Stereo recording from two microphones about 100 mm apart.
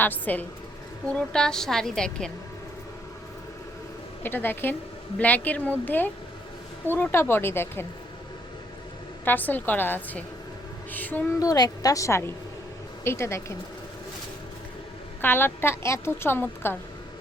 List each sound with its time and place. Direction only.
0.0 s a woman's voice: 15° left (ahead or behind)
1.1 s a woman's voice: 5° left (ahead or behind)
4.2 s a woman's voice: 20° left (ahead or behind)
9.2 s a woman's voice: 20° left (ahead or behind)
11.3 s a woman's voice: 40° left (ahead or behind)
15.2 s a woman's voice: 20° left (ahead or behind)